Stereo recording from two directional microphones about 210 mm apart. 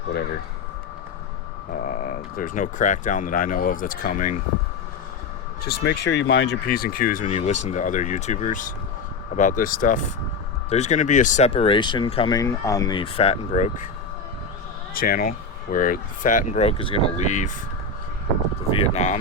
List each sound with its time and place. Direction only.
1.7 s speech: 40° left (ahead or behind)
5.6 s speech: 55° left (ahead or behind); by 13.8 s 35° left (ahead or behind)
14.9 s speech: 45° left (ahead or behind)
18.7 s speech: 30° left (ahead or behind)